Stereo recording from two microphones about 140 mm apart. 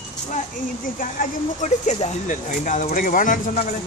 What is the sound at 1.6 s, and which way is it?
Speech, 60° left (ahead or behind).